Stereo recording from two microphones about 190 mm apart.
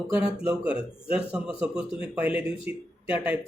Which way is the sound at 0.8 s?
30° left (ahead or behind).